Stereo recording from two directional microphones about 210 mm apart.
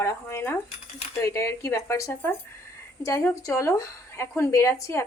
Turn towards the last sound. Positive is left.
turn(degrees=15)  # may be behind; listen again after turning